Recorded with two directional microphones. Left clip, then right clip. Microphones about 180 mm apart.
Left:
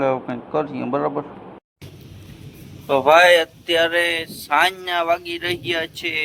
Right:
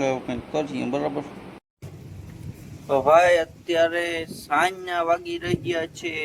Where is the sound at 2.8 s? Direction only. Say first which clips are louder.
Left 4 dB; 5° left (ahead or behind).